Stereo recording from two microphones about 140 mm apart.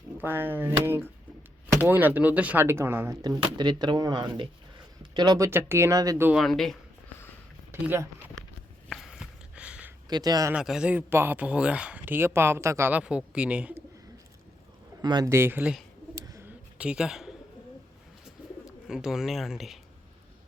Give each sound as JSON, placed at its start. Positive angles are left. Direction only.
{"t": 0.2, "sound": "a man's voice", "side_deg": -15}
{"t": 3.2, "sound": "speech", "side_deg": -30}
{"t": 5.5, "sound": "a man's voice", "side_deg": -15}
{"t": 6.3, "sound": "speech", "side_deg": 0}
{"t": 7.7, "sound": "a man's voice", "side_deg": -15}
{"t": 8.9, "sound": "a sound", "side_deg": 0}
{"t": 10.1, "sound": "speech", "side_deg": -30}
{"t": 10.5, "sound": "a man's voice", "side_deg": -5}
{"t": 15.0, "sound": "speech", "side_deg": -30}
{"t": 15.3, "sound": "a man's voice", "side_deg": -15}
{"t": 16.2, "sound": "bird", "side_deg": -25}
{"t": 16.7, "sound": "speech", "side_deg": -10}
{"t": 18.6, "sound": "speech", "side_deg": -5}